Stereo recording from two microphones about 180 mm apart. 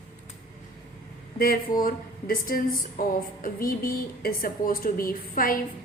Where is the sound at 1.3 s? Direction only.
55° left (ahead or behind).